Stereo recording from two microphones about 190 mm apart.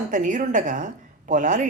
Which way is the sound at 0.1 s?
40° right (ahead or behind).